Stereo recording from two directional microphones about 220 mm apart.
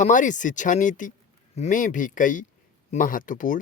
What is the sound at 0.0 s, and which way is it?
Speech, 35° left (ahead or behind).